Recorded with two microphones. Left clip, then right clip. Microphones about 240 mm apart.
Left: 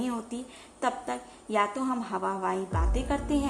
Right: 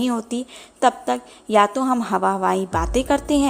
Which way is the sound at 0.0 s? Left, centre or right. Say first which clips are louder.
Right 10 dB; right.